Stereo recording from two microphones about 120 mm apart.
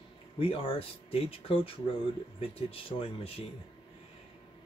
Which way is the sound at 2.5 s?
50° left (ahead or behind).